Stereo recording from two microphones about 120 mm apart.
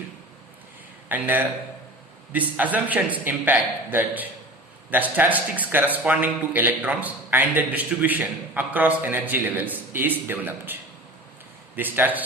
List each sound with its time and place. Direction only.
1.0 s a man's voice: 15° right (ahead or behind)
11.8 s a man's voice: 15° right (ahead or behind)